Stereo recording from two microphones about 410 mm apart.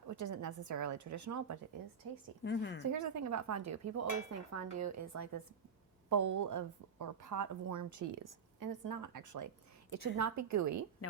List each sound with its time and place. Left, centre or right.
0.2 s speech: right
2.4 s a woman's voice: left
2.8 s speech: right